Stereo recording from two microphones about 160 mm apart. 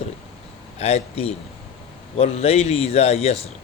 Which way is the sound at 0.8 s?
40° left (ahead or behind).